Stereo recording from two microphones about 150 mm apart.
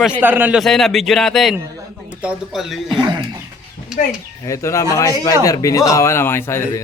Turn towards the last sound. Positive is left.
turn(degrees=15)  # may be behind; listen again after turning